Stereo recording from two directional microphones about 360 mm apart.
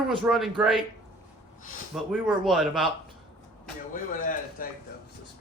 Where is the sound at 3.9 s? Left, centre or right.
Left.